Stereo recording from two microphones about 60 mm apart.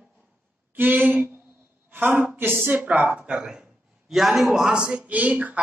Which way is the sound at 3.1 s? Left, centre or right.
Centre.